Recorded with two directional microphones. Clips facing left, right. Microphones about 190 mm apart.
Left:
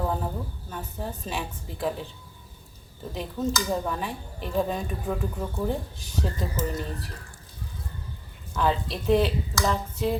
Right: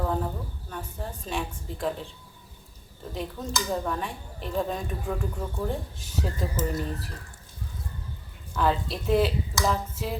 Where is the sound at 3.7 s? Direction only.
5° left (ahead or behind).